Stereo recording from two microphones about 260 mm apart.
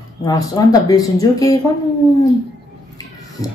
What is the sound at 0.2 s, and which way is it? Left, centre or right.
A woman's voice, centre.